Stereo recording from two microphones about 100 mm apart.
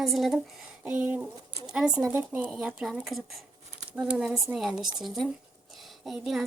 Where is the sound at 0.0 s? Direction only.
Centre (ahead or behind).